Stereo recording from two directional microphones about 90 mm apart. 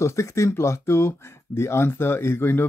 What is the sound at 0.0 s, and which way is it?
Speech, 30° left (ahead or behind).